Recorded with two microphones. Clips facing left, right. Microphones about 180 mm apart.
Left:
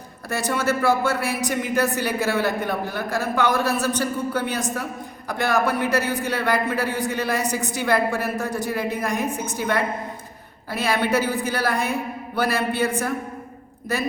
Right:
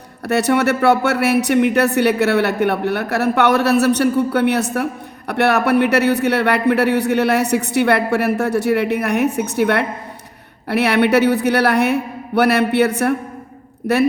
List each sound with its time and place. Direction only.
0.3 s speech: 70° right (ahead or behind)